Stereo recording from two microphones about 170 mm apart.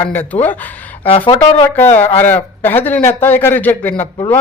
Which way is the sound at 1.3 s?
30° left (ahead or behind).